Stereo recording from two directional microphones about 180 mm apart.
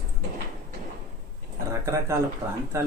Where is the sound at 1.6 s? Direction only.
15° right (ahead or behind).